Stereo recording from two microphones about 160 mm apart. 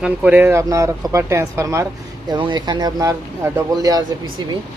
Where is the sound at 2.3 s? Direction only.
30° right (ahead or behind).